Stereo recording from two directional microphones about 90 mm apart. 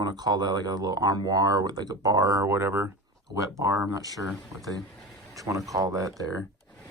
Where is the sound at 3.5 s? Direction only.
40° right (ahead or behind).